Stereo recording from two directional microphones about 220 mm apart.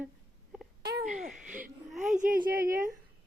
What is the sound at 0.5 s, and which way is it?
Wail, 5° right (ahead or behind).